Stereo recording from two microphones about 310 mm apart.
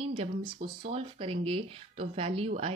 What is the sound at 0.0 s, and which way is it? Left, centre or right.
Speech, centre.